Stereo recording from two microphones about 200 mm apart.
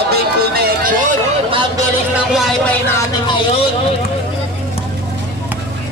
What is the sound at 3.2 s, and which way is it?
Vehicle, 25° left (ahead or behind).